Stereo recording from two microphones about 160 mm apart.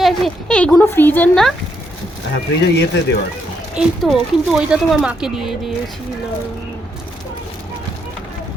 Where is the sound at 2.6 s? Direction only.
90° left.